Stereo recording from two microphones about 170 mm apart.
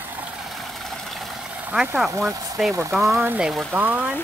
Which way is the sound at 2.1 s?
20° right (ahead or behind).